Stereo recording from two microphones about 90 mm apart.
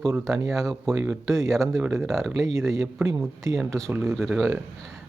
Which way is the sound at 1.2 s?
35° right (ahead or behind).